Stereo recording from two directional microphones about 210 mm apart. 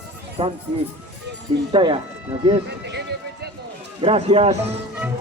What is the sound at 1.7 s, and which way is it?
Speech, 25° right (ahead or behind).